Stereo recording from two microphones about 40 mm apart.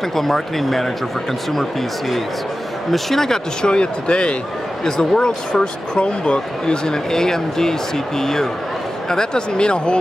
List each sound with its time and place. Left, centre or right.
0.1 s speech: centre
3.6 s speech: left
4.8 s speech: centre